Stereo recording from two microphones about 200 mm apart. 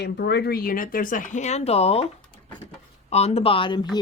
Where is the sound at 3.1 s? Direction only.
30° left (ahead or behind).